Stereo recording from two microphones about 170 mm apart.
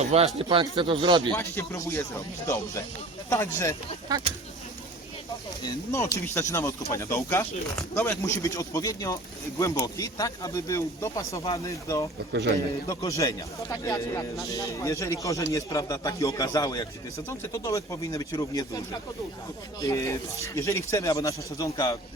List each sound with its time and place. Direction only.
0.0 s speech: 40° right (ahead or behind)
1.3 s speech: 15° left (ahead or behind)
3.2 s speech: 15° left (ahead or behind)
4.1 s speech: 20° right (ahead or behind)
5.6 s speech: 20° left (ahead or behind)
13.1 s speech: 20° left (ahead or behind)
19.8 s speech: 20° left (ahead or behind)